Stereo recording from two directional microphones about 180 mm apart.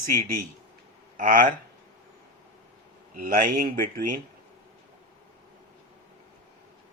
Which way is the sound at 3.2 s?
50° right (ahead or behind).